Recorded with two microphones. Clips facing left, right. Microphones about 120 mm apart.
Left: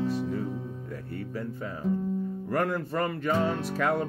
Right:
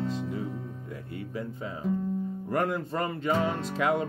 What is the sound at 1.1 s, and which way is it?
Music, 15° right (ahead or behind).